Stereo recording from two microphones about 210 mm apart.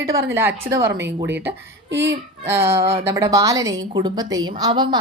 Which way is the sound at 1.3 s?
55° right (ahead or behind).